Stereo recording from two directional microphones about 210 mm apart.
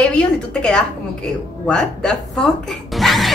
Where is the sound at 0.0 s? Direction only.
5° left (ahead or behind).